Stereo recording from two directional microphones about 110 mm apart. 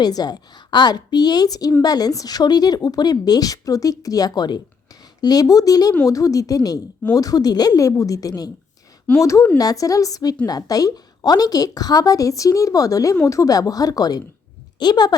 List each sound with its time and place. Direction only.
0.0 s speech: 35° left (ahead or behind)